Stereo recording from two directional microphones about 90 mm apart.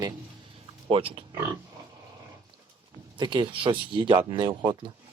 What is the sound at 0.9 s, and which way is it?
Speech, 90° right.